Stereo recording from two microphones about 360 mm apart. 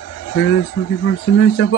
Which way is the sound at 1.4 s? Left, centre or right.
Left.